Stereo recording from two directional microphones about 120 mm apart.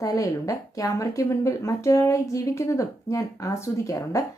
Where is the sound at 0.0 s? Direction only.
30° left (ahead or behind).